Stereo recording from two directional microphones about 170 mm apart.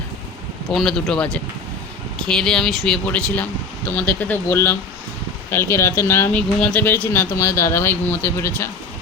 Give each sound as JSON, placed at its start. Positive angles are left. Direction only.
{"t": 0.7, "sound": "speech", "side_deg": 0}